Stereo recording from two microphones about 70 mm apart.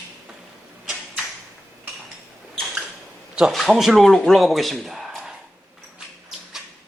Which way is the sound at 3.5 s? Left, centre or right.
Centre.